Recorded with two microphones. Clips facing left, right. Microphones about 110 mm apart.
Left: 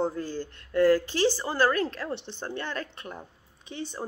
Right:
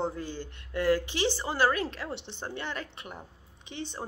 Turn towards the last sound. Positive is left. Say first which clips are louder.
# left 2 dB
turn(degrees=40)  # may be behind; listen again after turning